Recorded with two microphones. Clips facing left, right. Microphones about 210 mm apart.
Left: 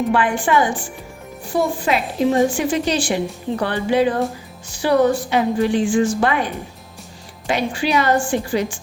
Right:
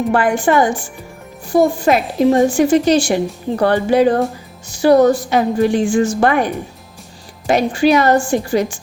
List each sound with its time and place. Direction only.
0.1 s a woman's voice: 45° right (ahead or behind)